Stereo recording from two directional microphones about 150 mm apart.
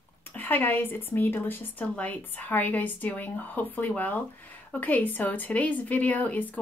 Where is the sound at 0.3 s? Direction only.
10° left (ahead or behind).